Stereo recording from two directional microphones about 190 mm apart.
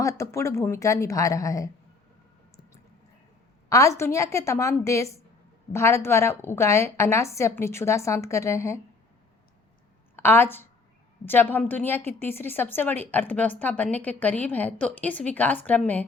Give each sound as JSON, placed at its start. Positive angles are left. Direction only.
{"t": 0.0, "sound": "a woman's voice", "side_deg": 15}
{"t": 3.7, "sound": "a woman's voice", "side_deg": 15}
{"t": 10.2, "sound": "a woman's voice", "side_deg": 10}